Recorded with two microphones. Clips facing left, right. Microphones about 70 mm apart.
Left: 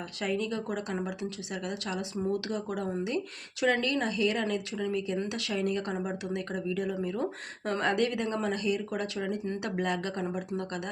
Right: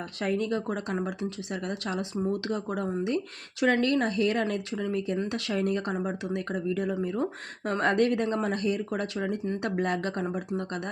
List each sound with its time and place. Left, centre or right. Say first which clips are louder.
0.2 s speech: right 3 dB; right
9.1 s speech: right 2 dB; right
10.2 s speech: right 2 dB; right
10.6 s speech: right 2 dB; right